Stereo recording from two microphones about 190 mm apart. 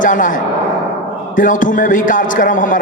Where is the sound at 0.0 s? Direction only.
45° left (ahead or behind).